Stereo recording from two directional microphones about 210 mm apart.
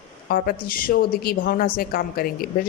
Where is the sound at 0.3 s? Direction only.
45° left (ahead or behind).